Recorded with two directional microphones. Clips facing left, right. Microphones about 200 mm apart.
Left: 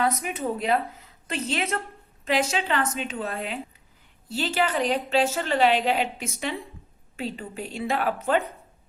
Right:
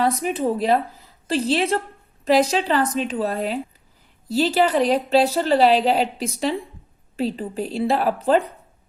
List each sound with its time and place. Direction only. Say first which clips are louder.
0.0 s a woman's voice: right 5 dB; 35° right (ahead or behind)